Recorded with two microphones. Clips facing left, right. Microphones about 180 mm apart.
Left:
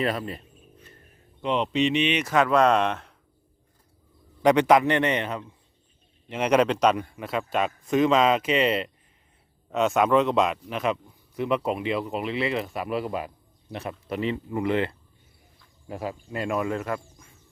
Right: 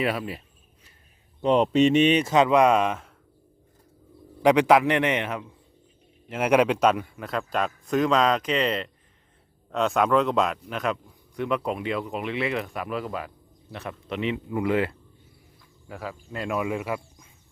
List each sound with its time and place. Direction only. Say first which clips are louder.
0.0 s a sound: even; 5° right (ahead or behind)
1.4 s speech: right 5 dB; 40° right (ahead or behind)
2.2 s a man's voice: right 2 dB; 20° right (ahead or behind)
4.4 s a man's voice: even; 10° right (ahead or behind)
15.9 s speech: left 4 dB; 20° left (ahead or behind)
16.3 s a man's voice: even; centre (ahead or behind)